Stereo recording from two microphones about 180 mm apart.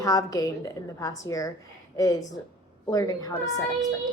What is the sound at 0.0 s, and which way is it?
A woman's voice, 20° left (ahead or behind).